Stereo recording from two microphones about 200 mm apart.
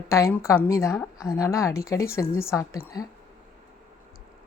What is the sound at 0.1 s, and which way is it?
A woman's voice, 15° left (ahead or behind).